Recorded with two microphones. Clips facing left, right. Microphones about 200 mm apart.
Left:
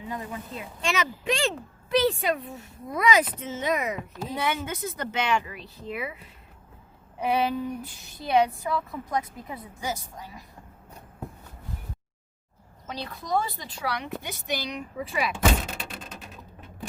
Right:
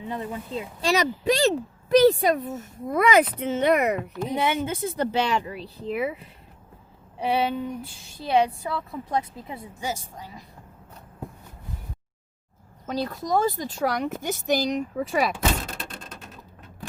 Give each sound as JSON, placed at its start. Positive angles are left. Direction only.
{"t": 0.1, "sound": "speech", "side_deg": -30}
{"t": 4.3, "sound": "speech", "side_deg": -20}
{"t": 7.2, "sound": "speech", "side_deg": -30}
{"t": 12.9, "sound": "speech", "side_deg": -45}
{"t": 15.7, "sound": "a sound", "side_deg": 5}